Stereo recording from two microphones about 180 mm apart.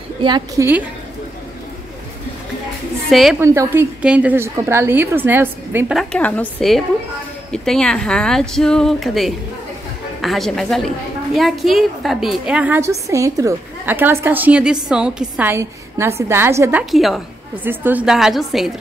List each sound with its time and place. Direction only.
0.2 s a woman's voice: 25° right (ahead or behind)
3.1 s speech: centre (ahead or behind)
3.3 s a woman's voice: 15° right (ahead or behind)
5.9 s a woman's voice: 10° left (ahead or behind); by 16.8 s 15° right (ahead or behind)
16.9 s speech: centre (ahead or behind)